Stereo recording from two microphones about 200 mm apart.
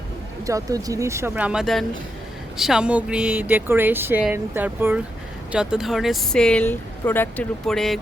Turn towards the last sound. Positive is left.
turn(degrees=0)  # may be behind; listen again after turning